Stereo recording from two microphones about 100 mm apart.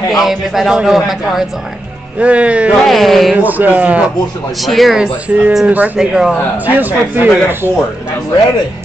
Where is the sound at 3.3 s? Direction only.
15° right (ahead or behind).